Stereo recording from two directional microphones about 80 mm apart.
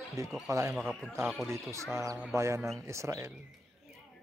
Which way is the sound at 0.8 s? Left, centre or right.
Centre.